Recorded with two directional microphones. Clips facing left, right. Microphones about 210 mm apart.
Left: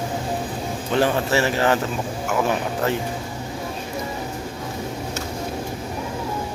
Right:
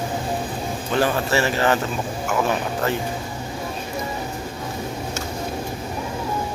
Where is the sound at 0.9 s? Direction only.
25° left (ahead or behind).